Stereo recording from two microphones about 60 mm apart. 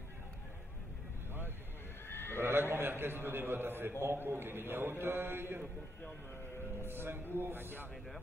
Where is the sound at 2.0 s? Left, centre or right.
Left.